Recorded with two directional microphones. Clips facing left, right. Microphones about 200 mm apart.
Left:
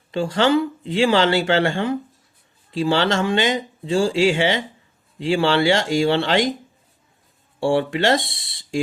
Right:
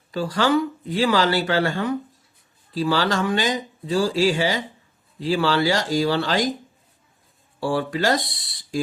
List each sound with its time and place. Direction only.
0.1 s speech: 25° left (ahead or behind)
7.6 s speech: 25° left (ahead or behind)